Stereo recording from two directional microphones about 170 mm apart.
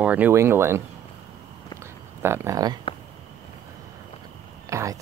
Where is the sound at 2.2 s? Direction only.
15° right (ahead or behind).